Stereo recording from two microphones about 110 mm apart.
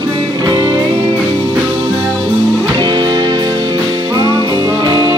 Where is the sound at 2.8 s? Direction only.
45° right (ahead or behind).